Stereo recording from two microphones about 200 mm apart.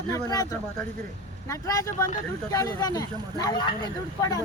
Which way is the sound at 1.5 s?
15° left (ahead or behind).